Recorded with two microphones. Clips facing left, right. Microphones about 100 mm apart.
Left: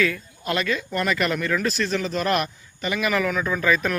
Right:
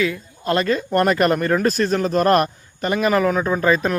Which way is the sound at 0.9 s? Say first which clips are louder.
Right 7 dB; 45° right (ahead or behind).